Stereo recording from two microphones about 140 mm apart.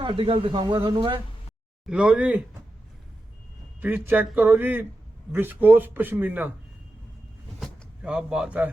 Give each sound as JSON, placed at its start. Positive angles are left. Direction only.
{"t": 0.0, "sound": "speech", "side_deg": -40}
{"t": 1.9, "sound": "a man's voice", "side_deg": -5}
{"t": 3.8, "sound": "a man's voice", "side_deg": -15}
{"t": 7.6, "sound": "a sound", "side_deg": -5}